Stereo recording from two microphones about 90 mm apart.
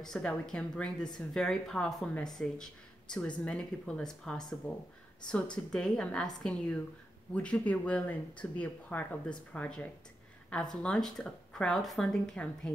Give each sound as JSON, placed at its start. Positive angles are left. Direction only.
{"t": 0.0, "sound": "a woman's voice", "side_deg": 5}
{"t": 4.7, "sound": "speech", "side_deg": 25}
{"t": 5.7, "sound": "speech", "side_deg": 10}